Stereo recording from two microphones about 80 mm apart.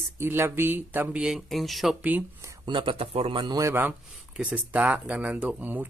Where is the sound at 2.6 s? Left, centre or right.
Right.